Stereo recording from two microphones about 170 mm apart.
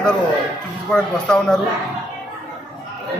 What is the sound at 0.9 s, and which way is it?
Speech, 5° left (ahead or behind).